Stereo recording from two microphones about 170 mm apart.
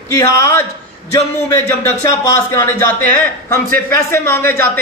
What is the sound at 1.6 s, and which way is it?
A man's voice, 15° left (ahead or behind).